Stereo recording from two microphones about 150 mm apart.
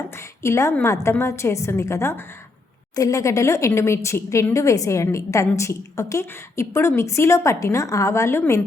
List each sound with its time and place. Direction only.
0.2 s a woman's voice: 20° left (ahead or behind)